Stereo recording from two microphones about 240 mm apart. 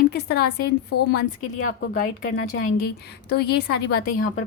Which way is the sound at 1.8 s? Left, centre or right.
Left.